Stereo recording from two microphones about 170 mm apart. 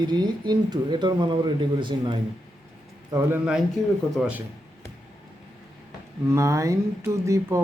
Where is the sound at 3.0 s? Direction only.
15° right (ahead or behind).